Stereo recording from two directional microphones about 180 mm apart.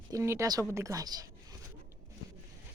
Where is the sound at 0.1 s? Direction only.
15° right (ahead or behind).